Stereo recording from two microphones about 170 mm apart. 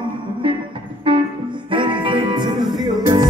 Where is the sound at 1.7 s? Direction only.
30° right (ahead or behind).